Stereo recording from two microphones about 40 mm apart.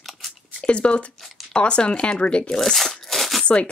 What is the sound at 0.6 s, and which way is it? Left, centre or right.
Speech, left.